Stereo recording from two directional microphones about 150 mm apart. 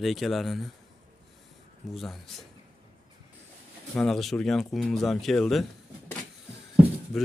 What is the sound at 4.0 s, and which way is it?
Speech, centre (ahead or behind).